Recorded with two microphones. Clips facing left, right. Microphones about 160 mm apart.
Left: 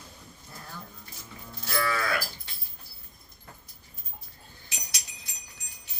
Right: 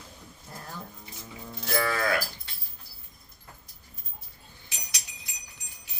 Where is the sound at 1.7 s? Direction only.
50° right (ahead or behind).